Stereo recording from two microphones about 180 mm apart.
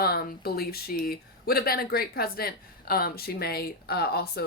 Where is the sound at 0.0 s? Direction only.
55° left (ahead or behind).